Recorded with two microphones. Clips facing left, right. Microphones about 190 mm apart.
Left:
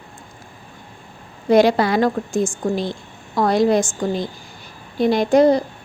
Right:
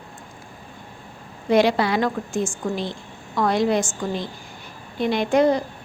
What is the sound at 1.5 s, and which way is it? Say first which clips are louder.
A woman's voice: left 4 dB; 40° left (ahead or behind).